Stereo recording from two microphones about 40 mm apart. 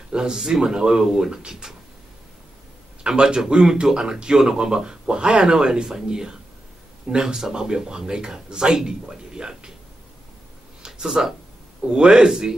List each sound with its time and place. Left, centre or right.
0.1 s speech: centre
3.0 s a man's voice: right
10.9 s a man's voice: centre